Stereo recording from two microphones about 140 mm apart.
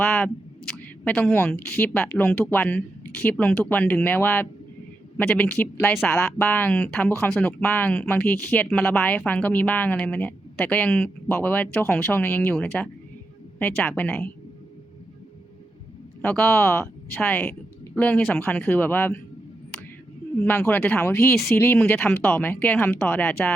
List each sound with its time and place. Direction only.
0.0 s a sound: 15° left (ahead or behind)
0.8 s a woman's voice: 10° left (ahead or behind)
16.2 s speech: 10° left (ahead or behind)
20.4 s speech: 15° left (ahead or behind)